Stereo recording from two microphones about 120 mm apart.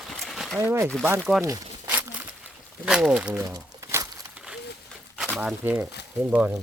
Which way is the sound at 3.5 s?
30° right (ahead or behind).